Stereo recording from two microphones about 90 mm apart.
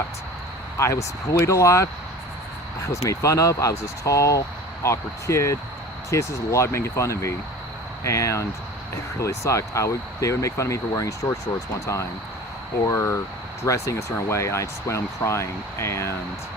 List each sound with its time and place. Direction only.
0.8 s speech: 35° left (ahead or behind)
12.9 s speech: 30° left (ahead or behind)